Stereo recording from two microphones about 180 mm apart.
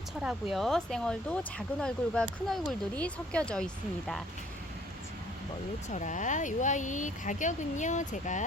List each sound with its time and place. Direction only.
0.5 s speech: centre (ahead or behind)
5.9 s speech: 45° left (ahead or behind)